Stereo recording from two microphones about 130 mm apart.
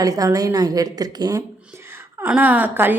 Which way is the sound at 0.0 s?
25° right (ahead or behind).